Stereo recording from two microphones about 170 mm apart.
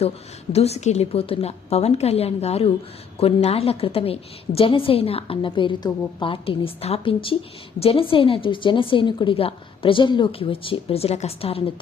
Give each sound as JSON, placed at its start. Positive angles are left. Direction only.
{"t": 0.5, "sound": "a woman's voice", "side_deg": 40}